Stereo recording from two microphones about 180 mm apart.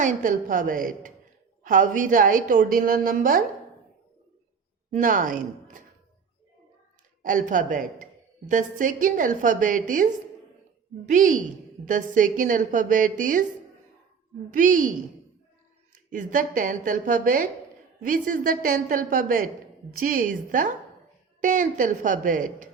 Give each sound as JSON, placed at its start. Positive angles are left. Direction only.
{"t": 0.0, "sound": "a woman's voice", "side_deg": -45}
{"t": 4.9, "sound": "a woman's voice", "side_deg": -45}
{"t": 7.2, "sound": "a woman's voice", "side_deg": -45}
{"t": 14.5, "sound": "a woman's voice", "side_deg": -45}
{"t": 16.0, "sound": "a woman's voice", "side_deg": -50}